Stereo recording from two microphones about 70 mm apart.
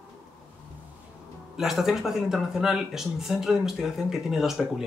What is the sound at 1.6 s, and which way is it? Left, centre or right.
Speech, centre.